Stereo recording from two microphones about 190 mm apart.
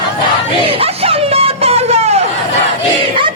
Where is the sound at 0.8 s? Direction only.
30° right (ahead or behind).